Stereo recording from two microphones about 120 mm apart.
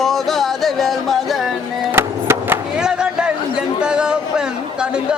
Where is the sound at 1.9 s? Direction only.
20° right (ahead or behind).